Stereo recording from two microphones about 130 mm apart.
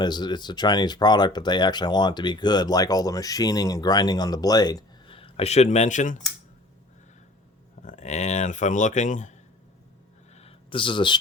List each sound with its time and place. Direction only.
0.0 s speech: 35° left (ahead or behind); by 6.2 s 70° left (ahead or behind)
7.8 s speech: 70° left (ahead or behind)
10.3 s a sound: 45° left (ahead or behind)